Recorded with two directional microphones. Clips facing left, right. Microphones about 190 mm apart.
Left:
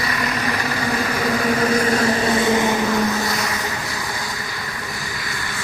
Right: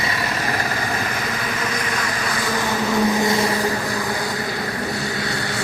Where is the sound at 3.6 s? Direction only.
40° right (ahead or behind).